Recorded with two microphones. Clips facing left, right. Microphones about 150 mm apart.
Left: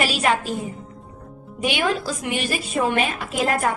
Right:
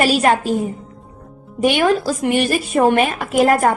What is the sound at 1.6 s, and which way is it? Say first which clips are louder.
A woman's voice: right 7 dB; 50° right (ahead or behind).